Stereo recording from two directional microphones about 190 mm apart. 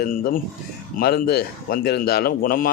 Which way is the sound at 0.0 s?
50° left (ahead or behind).